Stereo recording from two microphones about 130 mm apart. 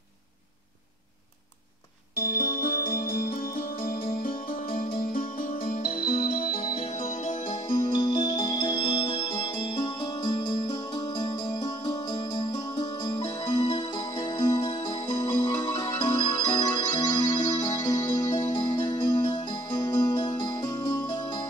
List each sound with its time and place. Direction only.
2.3 s music: 90° left
7.0 s music: 80° left
7.9 s music: 35° left (ahead or behind)